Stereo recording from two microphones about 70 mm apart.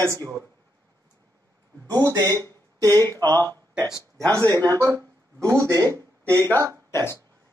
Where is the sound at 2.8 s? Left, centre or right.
Right.